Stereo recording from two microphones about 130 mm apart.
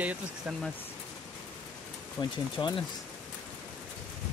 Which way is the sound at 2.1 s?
35° left (ahead or behind).